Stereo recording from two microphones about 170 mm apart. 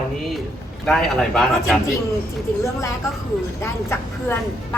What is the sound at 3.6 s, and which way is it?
Speech, 15° left (ahead or behind).